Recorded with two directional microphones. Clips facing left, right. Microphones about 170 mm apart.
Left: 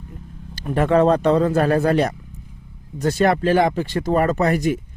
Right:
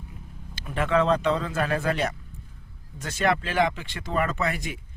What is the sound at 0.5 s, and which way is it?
Speech, 45° left (ahead or behind).